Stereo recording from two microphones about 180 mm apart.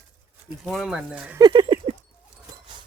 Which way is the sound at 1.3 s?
25° right (ahead or behind).